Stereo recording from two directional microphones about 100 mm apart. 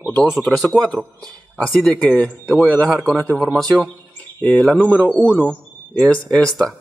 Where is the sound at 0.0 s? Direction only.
10° left (ahead or behind).